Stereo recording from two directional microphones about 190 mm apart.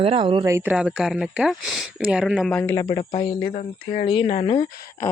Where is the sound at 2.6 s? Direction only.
15° left (ahead or behind).